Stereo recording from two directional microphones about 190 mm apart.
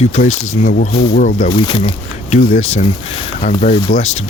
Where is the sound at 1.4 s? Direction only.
25° left (ahead or behind).